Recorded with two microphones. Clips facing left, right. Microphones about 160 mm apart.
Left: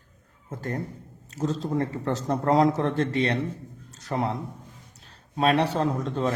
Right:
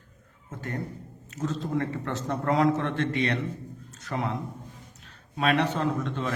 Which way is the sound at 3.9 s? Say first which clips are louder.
Left 3 dB; 35° left (ahead or behind).